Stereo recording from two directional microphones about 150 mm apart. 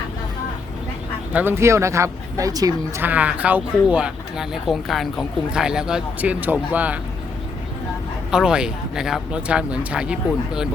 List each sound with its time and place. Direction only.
1.3 s speech: 10° right (ahead or behind)
3.0 s speech: 10° right (ahead or behind)
8.3 s speech: 5° right (ahead or behind)